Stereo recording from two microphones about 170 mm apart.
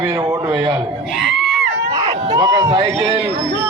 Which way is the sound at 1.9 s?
20° right (ahead or behind).